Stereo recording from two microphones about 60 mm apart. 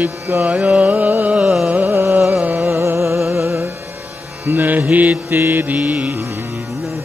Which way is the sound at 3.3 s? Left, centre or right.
Right.